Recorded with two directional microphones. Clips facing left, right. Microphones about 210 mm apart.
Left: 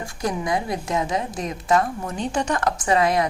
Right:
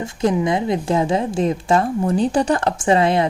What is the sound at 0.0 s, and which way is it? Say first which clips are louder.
A woman's voice: right 8 dB; 25° right (ahead or behind).